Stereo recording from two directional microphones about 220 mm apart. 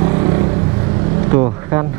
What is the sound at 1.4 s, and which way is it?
Speech, 15° right (ahead or behind).